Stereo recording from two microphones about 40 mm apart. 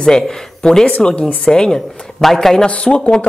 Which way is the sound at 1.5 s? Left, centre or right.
Centre.